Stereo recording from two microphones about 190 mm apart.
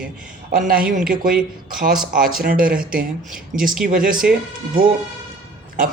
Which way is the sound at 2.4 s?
50° right (ahead or behind).